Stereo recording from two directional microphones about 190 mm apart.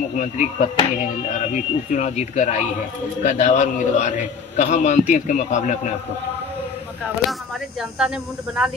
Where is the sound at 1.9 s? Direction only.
40° left (ahead or behind).